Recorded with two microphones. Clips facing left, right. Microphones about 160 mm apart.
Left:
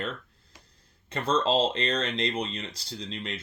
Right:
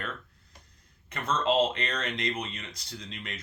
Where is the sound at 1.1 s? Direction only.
30° left (ahead or behind).